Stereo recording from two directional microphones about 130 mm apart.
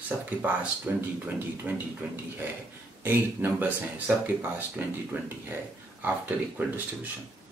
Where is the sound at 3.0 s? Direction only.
15° right (ahead or behind).